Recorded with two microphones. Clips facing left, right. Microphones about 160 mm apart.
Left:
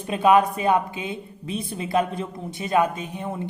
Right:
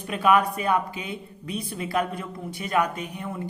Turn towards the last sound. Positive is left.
turn(degrees=25)  # may be behind; listen again after turning